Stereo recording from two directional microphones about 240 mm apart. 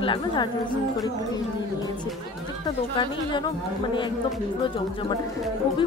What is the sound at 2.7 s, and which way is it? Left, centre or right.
Speech, centre.